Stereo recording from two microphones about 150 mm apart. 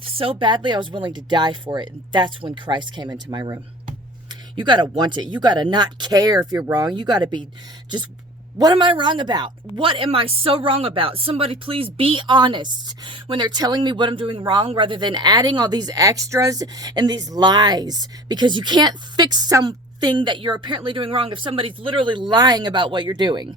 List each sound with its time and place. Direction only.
0.0 s a woman's voice: 40° right (ahead or behind)
8.5 s a woman's voice: 30° right (ahead or behind)